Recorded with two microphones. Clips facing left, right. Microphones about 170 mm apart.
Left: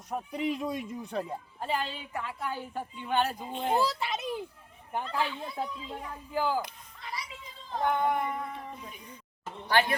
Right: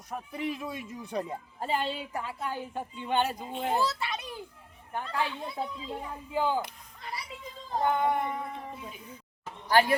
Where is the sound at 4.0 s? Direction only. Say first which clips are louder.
Left 2 dB; 20° left (ahead or behind).